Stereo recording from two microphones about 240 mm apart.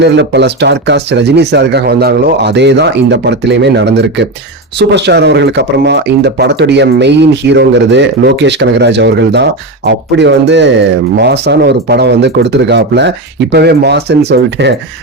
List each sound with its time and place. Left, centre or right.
0.0 s speech: right